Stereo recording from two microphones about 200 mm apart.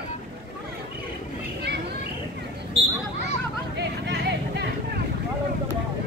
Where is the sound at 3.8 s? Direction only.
55° right (ahead or behind).